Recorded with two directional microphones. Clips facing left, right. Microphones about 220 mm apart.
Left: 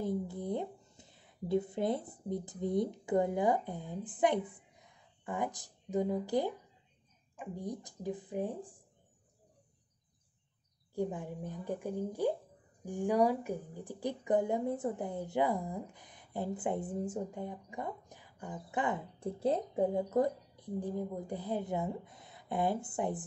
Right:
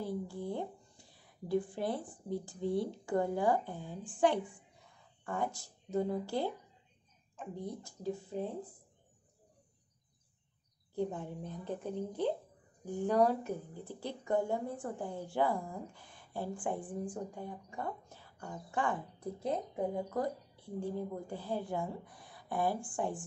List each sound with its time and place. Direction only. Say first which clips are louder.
0.0 s a woman's voice: left 3 dB; 20° left (ahead or behind)
4.6 s a sound: even; 20° left (ahead or behind)
7.3 s a woman's voice: left 1 dB; 15° left (ahead or behind)
11.0 s a woman's voice: left 1 dB; 15° left (ahead or behind)